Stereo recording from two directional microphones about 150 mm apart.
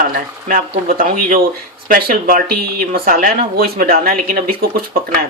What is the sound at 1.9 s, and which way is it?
Speech, 85° right.